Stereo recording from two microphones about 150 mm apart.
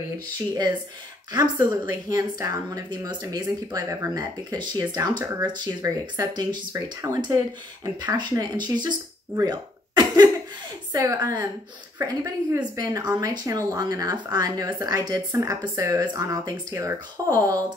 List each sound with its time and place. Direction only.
1.3 s speech: 25° right (ahead or behind)
8.7 s a sound: 25° right (ahead or behind)
10.9 s speech: 25° right (ahead or behind)